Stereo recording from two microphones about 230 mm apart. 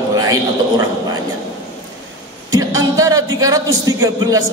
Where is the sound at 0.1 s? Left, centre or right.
Centre.